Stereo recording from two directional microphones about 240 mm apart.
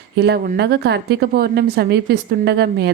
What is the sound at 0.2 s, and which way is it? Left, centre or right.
A woman's voice, right.